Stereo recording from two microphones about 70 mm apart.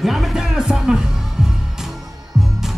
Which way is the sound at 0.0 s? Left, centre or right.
Centre.